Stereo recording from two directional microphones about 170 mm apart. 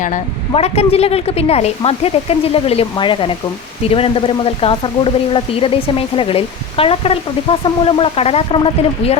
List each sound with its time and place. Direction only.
0.5 s speech: 35° left (ahead or behind)